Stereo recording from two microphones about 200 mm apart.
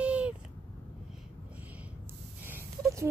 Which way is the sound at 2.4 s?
10° right (ahead or behind).